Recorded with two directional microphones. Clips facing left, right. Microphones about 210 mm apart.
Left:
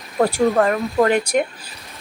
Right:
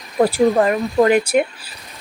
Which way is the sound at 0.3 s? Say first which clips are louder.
Right 1 dB; 5° right (ahead or behind).